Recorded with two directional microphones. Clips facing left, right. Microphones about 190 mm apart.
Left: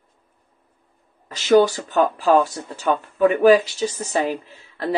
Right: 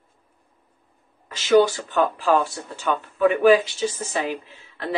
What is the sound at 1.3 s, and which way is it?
Speech, 40° left (ahead or behind).